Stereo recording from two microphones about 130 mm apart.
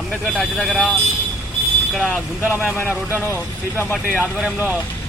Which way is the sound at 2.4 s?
10° right (ahead or behind).